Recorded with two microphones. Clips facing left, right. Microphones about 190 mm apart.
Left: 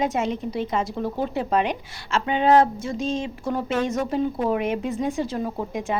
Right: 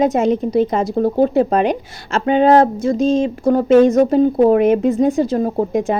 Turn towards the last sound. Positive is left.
turn(degrees=-40)  # may be behind; listen again after turning